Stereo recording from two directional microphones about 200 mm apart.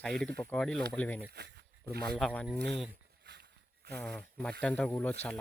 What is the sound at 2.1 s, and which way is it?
Speech, 5° left (ahead or behind).